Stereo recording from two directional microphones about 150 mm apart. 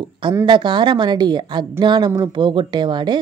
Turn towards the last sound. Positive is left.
turn(degrees=-30)  # may be behind; listen again after turning